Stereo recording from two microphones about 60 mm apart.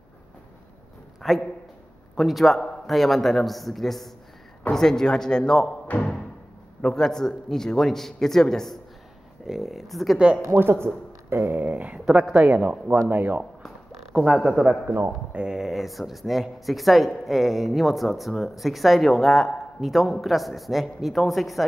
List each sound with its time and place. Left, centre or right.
1.2 s a man's voice: centre; by 6.1 s left
6.8 s a man's voice: centre
10.1 s speech: centre
10.4 s speech: right; by 12.7 s centre
13.1 s speech: right
14.3 s speech: centre
15.3 s speech: centre